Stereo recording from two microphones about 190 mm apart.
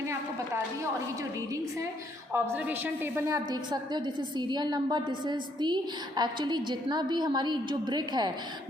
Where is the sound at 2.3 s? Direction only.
10° right (ahead or behind).